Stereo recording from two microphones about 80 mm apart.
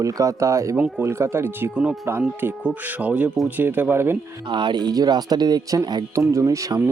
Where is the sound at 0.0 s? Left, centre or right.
Right.